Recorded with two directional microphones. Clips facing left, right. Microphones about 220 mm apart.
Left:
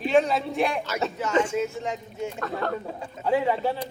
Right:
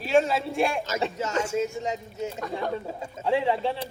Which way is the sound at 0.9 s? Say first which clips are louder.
Even; 40° right (ahead or behind).